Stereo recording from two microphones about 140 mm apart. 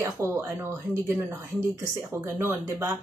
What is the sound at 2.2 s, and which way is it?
Speech, 15° right (ahead or behind).